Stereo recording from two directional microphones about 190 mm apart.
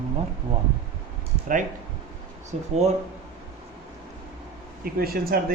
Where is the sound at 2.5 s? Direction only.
35° right (ahead or behind).